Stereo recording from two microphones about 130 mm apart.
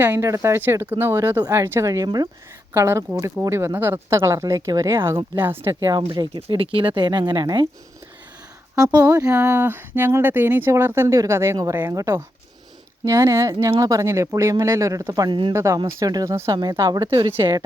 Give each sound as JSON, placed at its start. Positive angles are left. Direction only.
{"t": 0.0, "sound": "speech", "side_deg": -20}
{"t": 6.1, "sound": "speech", "side_deg": -35}
{"t": 9.2, "sound": "speech", "side_deg": -15}